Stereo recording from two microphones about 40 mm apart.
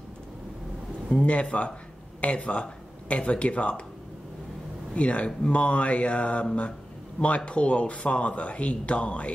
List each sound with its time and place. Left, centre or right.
1.1 s speech: left
4.9 s speech: left